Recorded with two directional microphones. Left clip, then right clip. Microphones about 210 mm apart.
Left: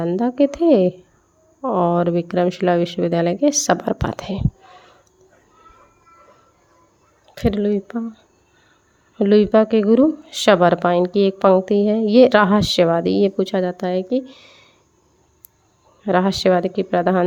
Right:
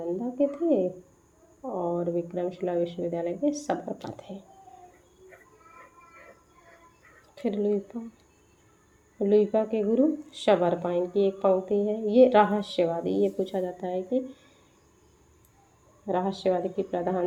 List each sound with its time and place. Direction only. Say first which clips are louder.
0.0 s speech: left 9 dB; 40° left (ahead or behind)
7.3 s speech: left 7 dB; 40° left (ahead or behind)
9.1 s speech: left 9 dB; 40° left (ahead or behind)
16.0 s speech: left 10 dB; 40° left (ahead or behind)